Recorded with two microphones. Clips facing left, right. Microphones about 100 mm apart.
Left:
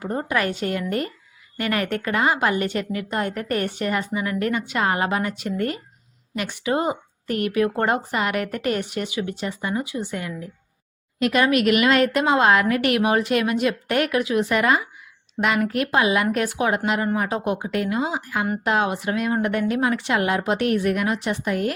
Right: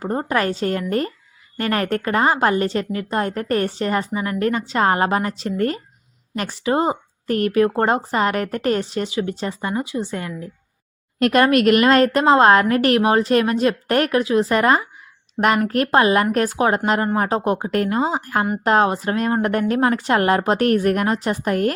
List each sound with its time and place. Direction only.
0.0 s a woman's voice: 35° right (ahead or behind)
11.2 s a woman's voice: 50° right (ahead or behind)